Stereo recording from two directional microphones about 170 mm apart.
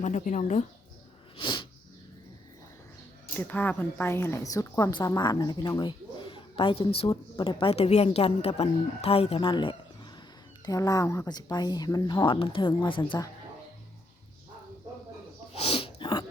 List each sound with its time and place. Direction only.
0.0 s speech: 45° left (ahead or behind)
1.4 s sneeze: 25° left (ahead or behind)
3.3 s a woman's voice: 10° left (ahead or behind)
15.5 s sneeze: 35° left (ahead or behind)